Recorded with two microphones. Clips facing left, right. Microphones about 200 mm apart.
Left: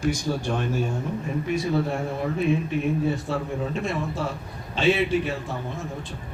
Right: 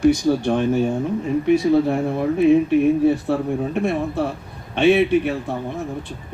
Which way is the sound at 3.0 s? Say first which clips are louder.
Right 8 dB; 60° right (ahead or behind).